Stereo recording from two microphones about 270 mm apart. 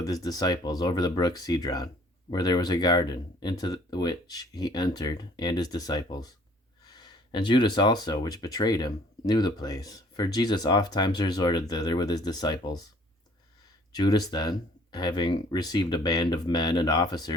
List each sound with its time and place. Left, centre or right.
0.0 s speech: centre
13.9 s speech: centre